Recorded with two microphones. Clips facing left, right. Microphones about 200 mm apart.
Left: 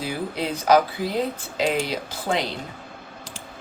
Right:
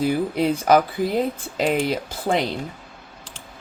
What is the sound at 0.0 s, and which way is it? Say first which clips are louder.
Speech: right 7 dB; 50° right (ahead or behind).